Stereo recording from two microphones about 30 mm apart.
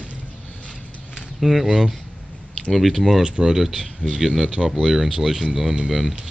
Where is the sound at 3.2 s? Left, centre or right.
Right.